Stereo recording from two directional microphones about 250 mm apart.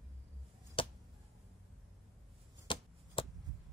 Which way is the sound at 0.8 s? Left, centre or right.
Left.